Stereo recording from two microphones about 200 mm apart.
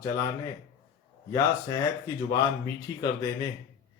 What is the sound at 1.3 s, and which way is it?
Speech, 15° left (ahead or behind).